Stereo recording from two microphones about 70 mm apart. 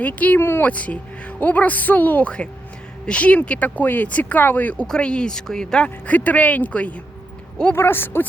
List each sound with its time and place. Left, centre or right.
0.0 s speech: left
0.7 s speech: centre
7.8 s speech: left